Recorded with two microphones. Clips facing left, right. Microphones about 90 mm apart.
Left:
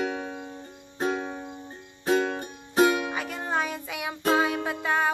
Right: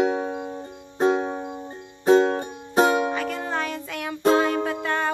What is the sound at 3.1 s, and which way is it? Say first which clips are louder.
Music: right 3 dB; 10° left (ahead or behind).